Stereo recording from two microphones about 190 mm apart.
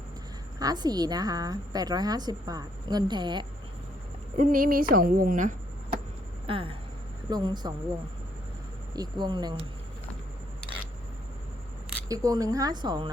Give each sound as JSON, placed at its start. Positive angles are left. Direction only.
{"t": 0.6, "sound": "a woman's voice", "side_deg": -20}
{"t": 4.4, "sound": "a woman's voice", "side_deg": -45}
{"t": 6.5, "sound": "a woman's voice", "side_deg": -30}
{"t": 8.9, "sound": "a woman's voice", "side_deg": -20}
{"t": 12.0, "sound": "a woman's voice", "side_deg": -20}